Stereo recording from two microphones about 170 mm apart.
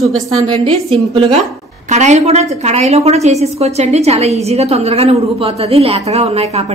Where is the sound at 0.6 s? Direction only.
35° right (ahead or behind).